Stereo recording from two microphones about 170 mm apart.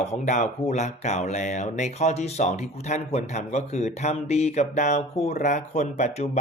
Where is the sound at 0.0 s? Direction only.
45° left (ahead or behind).